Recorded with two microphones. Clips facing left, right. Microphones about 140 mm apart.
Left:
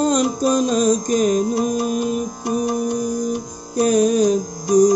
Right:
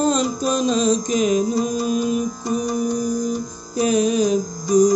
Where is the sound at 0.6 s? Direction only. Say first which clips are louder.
Left 1 dB; 50° left (ahead or behind).